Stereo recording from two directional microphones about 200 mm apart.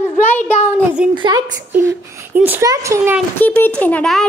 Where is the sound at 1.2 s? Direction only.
20° right (ahead or behind).